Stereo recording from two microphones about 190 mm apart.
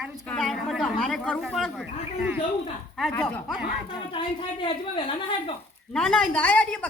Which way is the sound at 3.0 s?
5° left (ahead or behind).